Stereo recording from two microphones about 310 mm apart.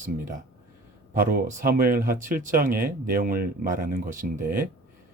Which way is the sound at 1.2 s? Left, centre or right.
Right.